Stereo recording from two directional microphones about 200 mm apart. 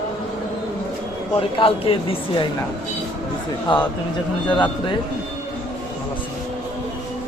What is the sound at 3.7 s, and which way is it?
Speech, 25° left (ahead or behind).